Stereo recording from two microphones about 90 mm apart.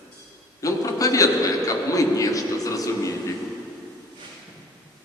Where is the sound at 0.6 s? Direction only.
40° left (ahead or behind).